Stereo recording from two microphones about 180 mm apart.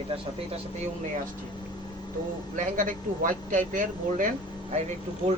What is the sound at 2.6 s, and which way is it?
Speech, 50° right (ahead or behind).